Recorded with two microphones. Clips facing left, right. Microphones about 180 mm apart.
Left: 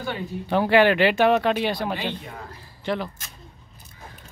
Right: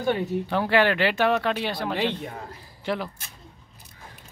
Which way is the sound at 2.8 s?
5° right (ahead or behind).